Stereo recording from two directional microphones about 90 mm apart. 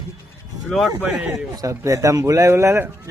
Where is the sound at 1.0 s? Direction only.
15° right (ahead or behind).